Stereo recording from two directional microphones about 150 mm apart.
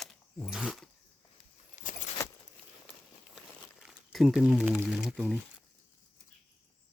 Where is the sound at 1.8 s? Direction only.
55° left (ahead or behind).